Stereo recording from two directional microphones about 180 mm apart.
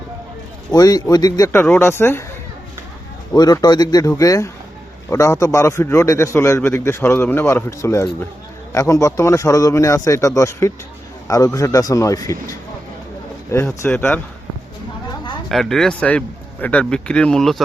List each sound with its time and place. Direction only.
0.7 s a man's voice: 20° left (ahead or behind)
3.3 s a man's voice: 20° left (ahead or behind)
15.4 s a man's voice: centre (ahead or behind)